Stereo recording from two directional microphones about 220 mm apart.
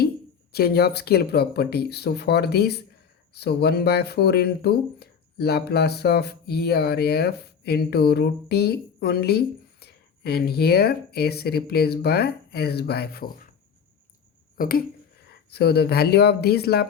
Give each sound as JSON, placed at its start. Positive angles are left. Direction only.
{"t": 0.5, "sound": "speech", "side_deg": 45}
{"t": 14.5, "sound": "speech", "side_deg": 40}